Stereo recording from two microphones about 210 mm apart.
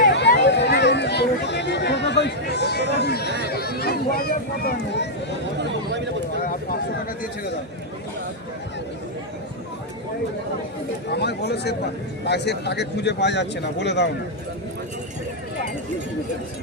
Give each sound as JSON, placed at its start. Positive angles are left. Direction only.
{"t": 0.1, "sound": "a sound", "side_deg": 55}
{"t": 3.4, "sound": "a man's voice", "side_deg": 50}
{"t": 5.5, "sound": "a man's voice", "side_deg": -55}
{"t": 6.4, "sound": "speech", "side_deg": 40}
{"t": 11.1, "sound": "a man's voice", "side_deg": 50}